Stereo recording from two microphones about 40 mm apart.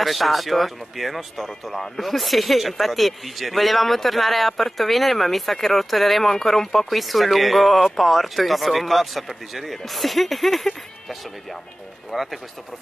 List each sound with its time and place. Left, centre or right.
0.0 s speech: centre
12.1 s speech: centre